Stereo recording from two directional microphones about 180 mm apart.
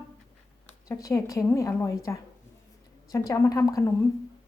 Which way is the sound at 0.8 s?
20° left (ahead or behind).